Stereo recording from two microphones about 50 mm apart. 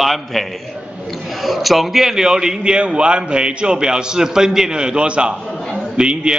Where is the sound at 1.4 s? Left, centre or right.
Centre.